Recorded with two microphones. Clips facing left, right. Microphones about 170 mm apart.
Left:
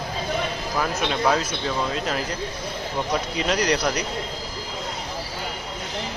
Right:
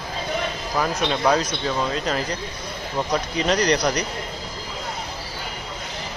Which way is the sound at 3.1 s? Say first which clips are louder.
Right 3 dB; 5° left (ahead or behind).